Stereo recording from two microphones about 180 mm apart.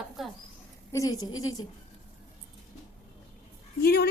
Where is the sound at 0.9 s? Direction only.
20° left (ahead or behind).